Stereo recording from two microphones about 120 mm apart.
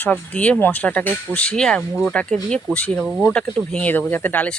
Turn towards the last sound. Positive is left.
turn(degrees=15)  # may be behind; listen again after turning